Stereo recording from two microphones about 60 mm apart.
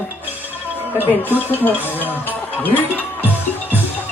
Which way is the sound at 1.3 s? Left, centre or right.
Left.